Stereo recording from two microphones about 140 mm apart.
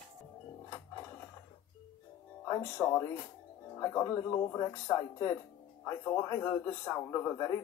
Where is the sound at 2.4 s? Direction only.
20° left (ahead or behind).